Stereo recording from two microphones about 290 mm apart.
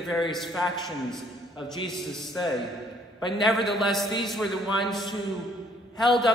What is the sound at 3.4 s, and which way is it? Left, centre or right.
A man's voice, centre.